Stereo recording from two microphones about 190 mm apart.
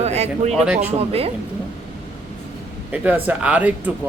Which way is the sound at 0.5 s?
5° right (ahead or behind).